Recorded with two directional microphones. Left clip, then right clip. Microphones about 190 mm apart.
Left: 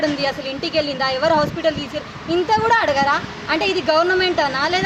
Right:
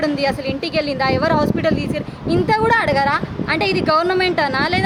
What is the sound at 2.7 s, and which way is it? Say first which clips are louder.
A woman's voice: even; 25° right (ahead or behind).